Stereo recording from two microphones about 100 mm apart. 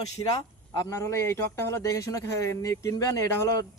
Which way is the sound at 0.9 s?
30° left (ahead or behind).